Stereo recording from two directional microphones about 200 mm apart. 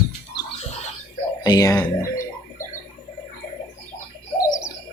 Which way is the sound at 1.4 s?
20° left (ahead or behind).